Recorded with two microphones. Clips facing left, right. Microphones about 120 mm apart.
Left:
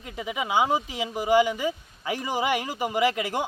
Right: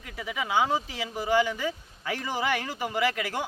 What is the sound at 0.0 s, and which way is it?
Speech, 20° left (ahead or behind).